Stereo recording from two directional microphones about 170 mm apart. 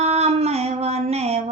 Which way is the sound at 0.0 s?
40° right (ahead or behind).